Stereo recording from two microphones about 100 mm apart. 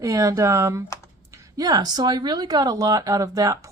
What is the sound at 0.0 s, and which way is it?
Speech, 35° right (ahead or behind).